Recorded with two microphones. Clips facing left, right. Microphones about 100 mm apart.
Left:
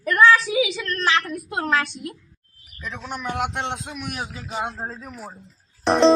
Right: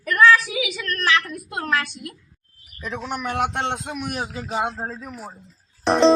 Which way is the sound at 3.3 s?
55° right (ahead or behind).